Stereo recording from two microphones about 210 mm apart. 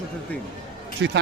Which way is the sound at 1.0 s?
60° right (ahead or behind).